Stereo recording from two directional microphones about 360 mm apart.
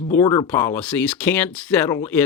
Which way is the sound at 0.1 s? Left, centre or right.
Centre.